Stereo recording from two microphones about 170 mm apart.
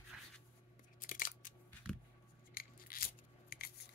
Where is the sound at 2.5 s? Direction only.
60° left (ahead or behind).